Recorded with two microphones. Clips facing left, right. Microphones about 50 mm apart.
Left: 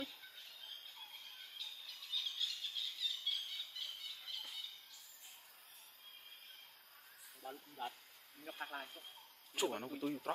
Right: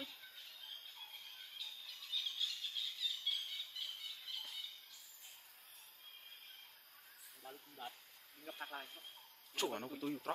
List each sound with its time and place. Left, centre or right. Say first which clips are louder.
1.6 s squeal: even; centre
7.4 s cricket: left 5 dB; centre
8.5 s speech: left 2 dB; centre